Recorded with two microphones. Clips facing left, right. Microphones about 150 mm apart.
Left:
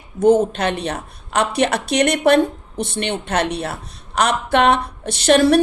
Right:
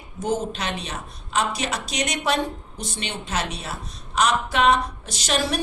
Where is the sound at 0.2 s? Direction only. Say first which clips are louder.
Left 11 dB; 60° left (ahead or behind).